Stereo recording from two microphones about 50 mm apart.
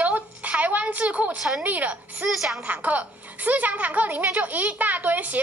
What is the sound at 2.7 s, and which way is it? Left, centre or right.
A child's voice, right.